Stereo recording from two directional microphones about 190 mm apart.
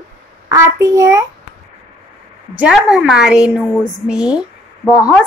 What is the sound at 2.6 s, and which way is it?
A woman's voice, 5° right (ahead or behind).